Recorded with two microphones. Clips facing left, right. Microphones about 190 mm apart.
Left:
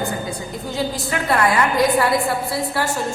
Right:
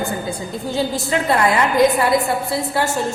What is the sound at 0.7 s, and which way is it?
A woman's voice, 25° right (ahead or behind).